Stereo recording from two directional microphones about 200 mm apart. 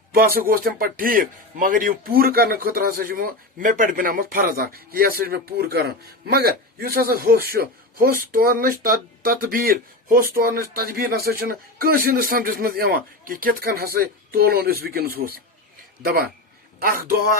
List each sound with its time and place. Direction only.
0.1 s speech: 45° right (ahead or behind)